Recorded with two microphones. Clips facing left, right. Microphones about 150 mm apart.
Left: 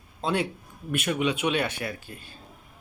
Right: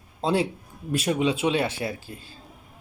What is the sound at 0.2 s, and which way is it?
A man's voice, 30° right (ahead or behind).